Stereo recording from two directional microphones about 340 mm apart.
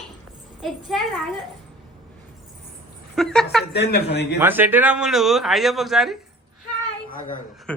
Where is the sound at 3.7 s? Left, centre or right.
Left.